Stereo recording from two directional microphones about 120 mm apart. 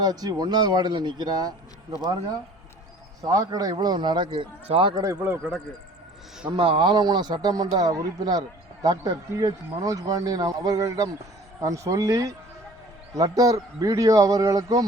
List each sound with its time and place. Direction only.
0.0 s a man's voice: 30° right (ahead or behind)
3.2 s a man's voice: 30° right (ahead or behind)
5.2 s speech: 5° right (ahead or behind)
6.6 s a man's voice: 45° right (ahead or behind); by 14.8 s 30° right (ahead or behind)